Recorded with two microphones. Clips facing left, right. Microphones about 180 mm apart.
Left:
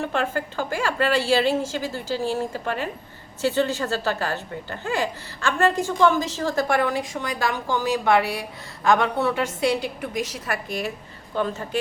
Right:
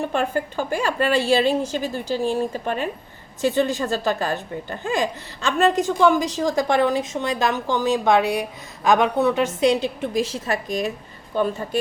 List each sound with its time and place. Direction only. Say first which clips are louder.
0.0 s a woman's voice: right 2 dB; 15° right (ahead or behind)